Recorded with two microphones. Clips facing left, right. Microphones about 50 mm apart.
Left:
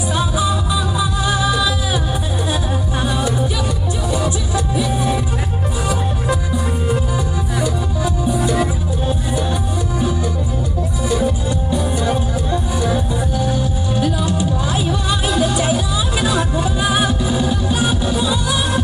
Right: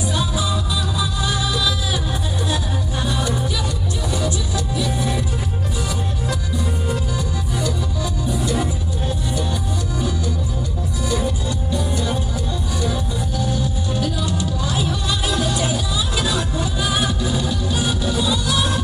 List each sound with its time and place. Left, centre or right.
0.1 s music: centre
3.0 s music: centre
7.6 s music: centre
11.1 s music: centre